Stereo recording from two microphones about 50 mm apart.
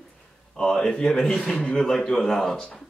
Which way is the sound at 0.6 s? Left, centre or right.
Centre.